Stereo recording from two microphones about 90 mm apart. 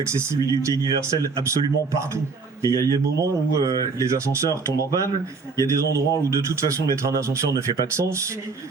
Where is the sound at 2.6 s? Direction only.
40° right (ahead or behind).